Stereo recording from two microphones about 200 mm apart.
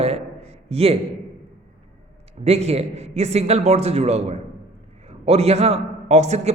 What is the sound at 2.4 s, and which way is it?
A man's voice, 30° right (ahead or behind).